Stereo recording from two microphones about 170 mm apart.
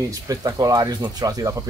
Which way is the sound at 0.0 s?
20° right (ahead or behind).